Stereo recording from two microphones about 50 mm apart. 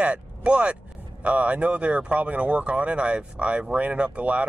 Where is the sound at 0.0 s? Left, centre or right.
Right.